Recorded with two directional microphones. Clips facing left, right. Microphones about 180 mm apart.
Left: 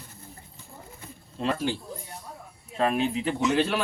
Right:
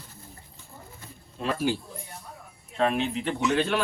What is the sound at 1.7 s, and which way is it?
Speech, 10° right (ahead or behind).